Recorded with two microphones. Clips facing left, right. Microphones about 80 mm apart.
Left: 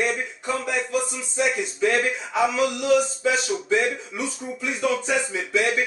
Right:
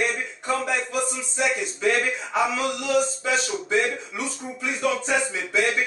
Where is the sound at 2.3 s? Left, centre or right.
Centre.